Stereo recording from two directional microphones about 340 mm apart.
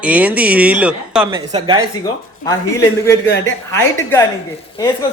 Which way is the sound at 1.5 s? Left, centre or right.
Centre.